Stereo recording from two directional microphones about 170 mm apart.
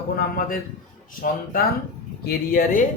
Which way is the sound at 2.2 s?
60° left (ahead or behind).